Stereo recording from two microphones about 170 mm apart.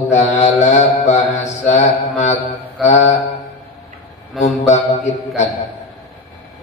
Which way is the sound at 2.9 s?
45° left (ahead or behind).